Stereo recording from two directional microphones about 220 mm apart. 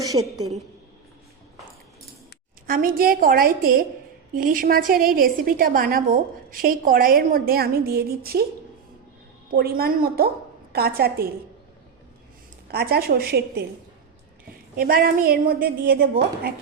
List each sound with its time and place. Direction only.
0.0 s a woman's voice: 15° right (ahead or behind)
2.6 s a woman's voice: 40° right (ahead or behind)
9.5 s a woman's voice: 45° right (ahead or behind)
12.6 s a woman's voice: 45° right (ahead or behind)
14.8 s a woman's voice: 40° right (ahead or behind)